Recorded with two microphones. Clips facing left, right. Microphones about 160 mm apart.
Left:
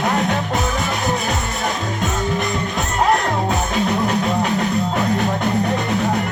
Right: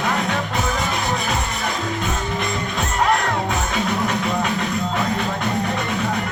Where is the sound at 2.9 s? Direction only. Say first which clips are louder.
Left 2 dB; 40° left (ahead or behind).